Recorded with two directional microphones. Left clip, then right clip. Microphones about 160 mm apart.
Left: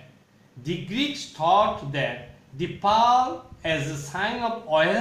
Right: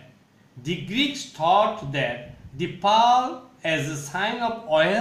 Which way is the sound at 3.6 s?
35° right (ahead or behind).